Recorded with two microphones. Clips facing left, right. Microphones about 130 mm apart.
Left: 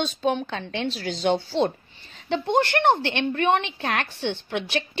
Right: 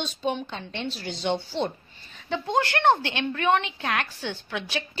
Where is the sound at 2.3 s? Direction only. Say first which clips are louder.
Left 3 dB; 25° left (ahead or behind).